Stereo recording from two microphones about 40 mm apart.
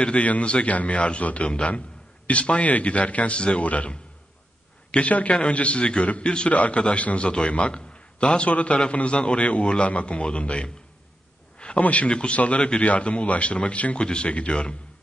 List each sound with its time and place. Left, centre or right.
0.0 s a man's voice: left
6.5 s a man's voice: left
11.5 s a sound: left
11.8 s a man's voice: left
12.1 s a man's voice: left